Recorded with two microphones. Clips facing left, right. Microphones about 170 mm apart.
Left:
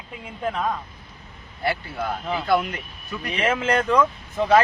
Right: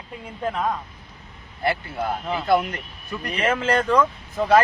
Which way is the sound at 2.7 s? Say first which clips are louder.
Right 1 dB; centre (ahead or behind).